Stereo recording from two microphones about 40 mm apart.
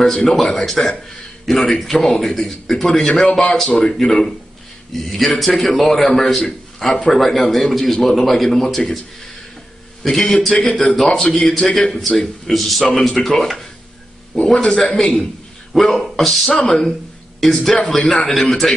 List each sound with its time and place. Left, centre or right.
0.0 s a man's voice: centre
3.6 s a man's voice: left
3.9 s a man's voice: centre
10.0 s a man's voice: centre
14.4 s a man's voice: centre
14.8 s a man's voice: centre